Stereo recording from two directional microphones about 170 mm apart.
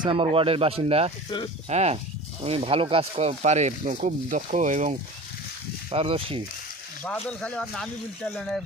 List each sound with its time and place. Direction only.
0.0 s speech: 30° right (ahead or behind); by 4.9 s 45° right (ahead or behind)
5.9 s speech: 35° right (ahead or behind)
7.0 s speech: 10° left (ahead or behind)